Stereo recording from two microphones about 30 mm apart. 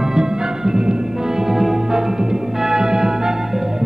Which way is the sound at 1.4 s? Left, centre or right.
Centre.